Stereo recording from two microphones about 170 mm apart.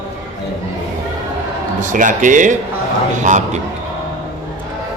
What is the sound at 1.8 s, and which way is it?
Speech, 50° right (ahead or behind).